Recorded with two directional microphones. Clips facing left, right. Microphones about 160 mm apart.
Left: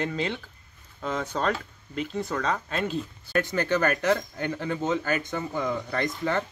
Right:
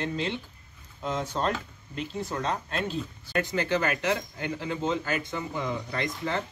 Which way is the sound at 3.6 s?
55° left (ahead or behind).